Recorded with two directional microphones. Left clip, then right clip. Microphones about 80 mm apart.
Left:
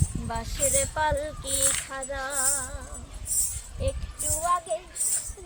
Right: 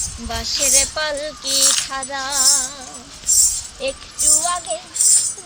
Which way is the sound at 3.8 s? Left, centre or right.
Left.